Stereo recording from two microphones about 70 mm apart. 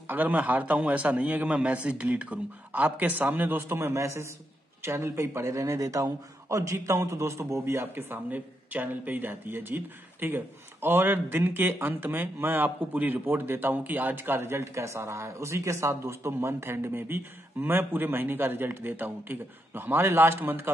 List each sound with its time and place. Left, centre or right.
0.0 s a man's voice: right